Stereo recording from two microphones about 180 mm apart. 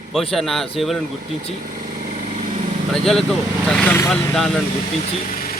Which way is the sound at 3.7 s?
10° left (ahead or behind).